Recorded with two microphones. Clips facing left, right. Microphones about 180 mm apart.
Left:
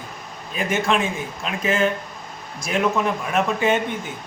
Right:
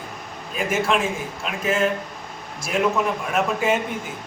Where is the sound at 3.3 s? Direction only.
5° right (ahead or behind).